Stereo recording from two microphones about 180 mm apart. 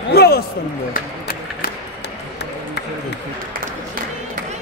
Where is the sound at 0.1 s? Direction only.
60° left (ahead or behind).